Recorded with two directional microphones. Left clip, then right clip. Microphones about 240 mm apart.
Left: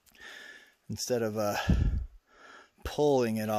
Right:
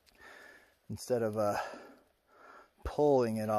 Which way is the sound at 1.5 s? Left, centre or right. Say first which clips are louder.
Left 3 dB; left.